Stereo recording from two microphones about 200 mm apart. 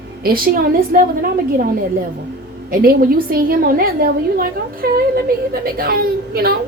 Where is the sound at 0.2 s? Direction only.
45° right (ahead or behind).